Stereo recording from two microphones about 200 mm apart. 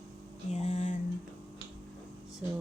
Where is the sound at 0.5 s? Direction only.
35° left (ahead or behind).